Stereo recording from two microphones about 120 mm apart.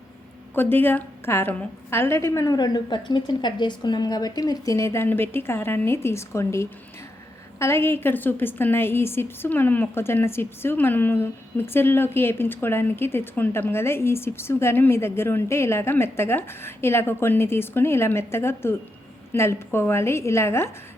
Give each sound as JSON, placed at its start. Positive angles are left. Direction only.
{"t": 0.5, "sound": "a woman's voice", "side_deg": 20}